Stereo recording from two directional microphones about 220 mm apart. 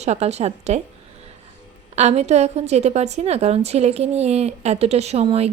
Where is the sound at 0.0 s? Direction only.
30° right (ahead or behind).